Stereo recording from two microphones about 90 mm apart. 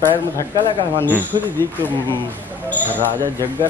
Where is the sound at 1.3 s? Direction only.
50° right (ahead or behind).